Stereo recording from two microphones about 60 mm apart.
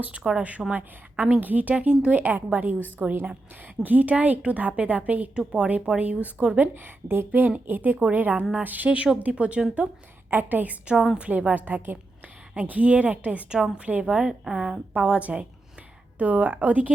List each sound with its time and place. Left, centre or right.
0.2 s speech: centre
0.7 s a woman's voice: right
1.7 s a woman's voice: centre
5.3 s a woman's voice: centre
6.6 s a woman's voice: right
10.9 s speech: centre
11.2 s a woman's voice: right
14.4 s a woman's voice: centre; by 16.9 s right